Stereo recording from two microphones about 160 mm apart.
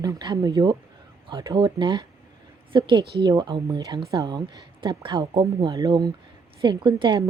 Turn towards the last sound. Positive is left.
turn(degrees=-25)  # may be behind; listen again after turning